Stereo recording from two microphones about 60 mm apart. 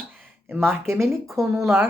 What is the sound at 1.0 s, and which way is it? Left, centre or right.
Speech, right.